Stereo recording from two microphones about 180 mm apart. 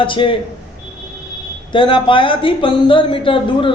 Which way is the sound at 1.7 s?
30° left (ahead or behind).